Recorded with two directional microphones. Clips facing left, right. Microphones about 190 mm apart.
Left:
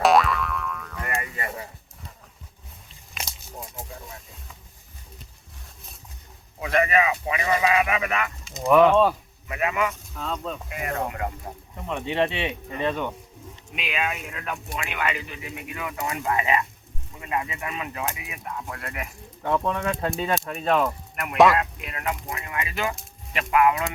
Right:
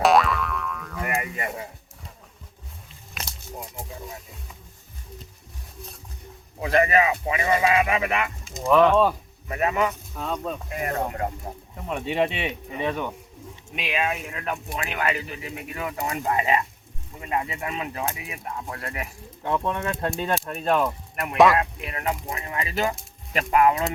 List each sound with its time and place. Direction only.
0.0 s boing: centre (ahead or behind)
1.2 s a sound: 15° right (ahead or behind)
3.2 s snake: centre (ahead or behind)
6.6 s speech: 30° right (ahead or behind)
8.6 s speech: 5° left (ahead or behind)
9.5 s speech: 40° right (ahead or behind)
10.2 s speech: 10° right (ahead or behind)
10.7 s speech: 40° right (ahead or behind)
11.9 s speech: 10° right (ahead or behind)
13.7 s speech: 30° right (ahead or behind)
19.4 s speech: centre (ahead or behind)
21.6 s speech: 30° right (ahead or behind)